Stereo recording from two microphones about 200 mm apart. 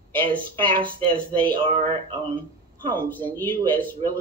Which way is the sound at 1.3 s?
25° right (ahead or behind).